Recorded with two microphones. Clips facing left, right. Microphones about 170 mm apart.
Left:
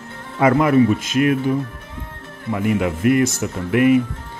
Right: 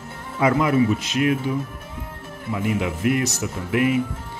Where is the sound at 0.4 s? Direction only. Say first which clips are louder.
Left 4 dB; 55° left (ahead or behind).